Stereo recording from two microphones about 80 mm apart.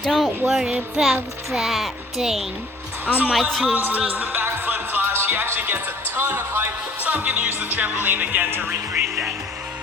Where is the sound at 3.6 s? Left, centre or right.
Centre.